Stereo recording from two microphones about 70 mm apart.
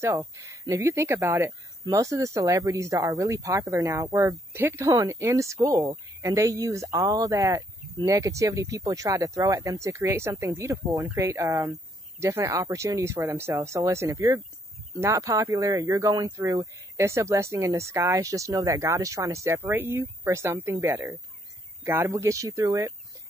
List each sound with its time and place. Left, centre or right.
0.0 s speech: right
4.6 s speech: right
12.2 s speech: right